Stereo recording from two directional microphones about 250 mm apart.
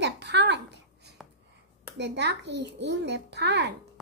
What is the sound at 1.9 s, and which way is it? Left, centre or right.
A child's voice, right.